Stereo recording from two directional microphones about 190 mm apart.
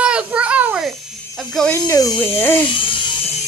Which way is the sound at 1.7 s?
20° left (ahead or behind).